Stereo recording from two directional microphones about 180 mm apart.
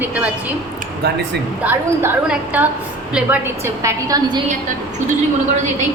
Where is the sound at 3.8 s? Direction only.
20° right (ahead or behind).